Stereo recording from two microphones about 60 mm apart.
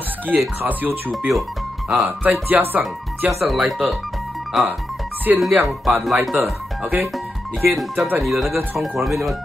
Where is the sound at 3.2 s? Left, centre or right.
Centre.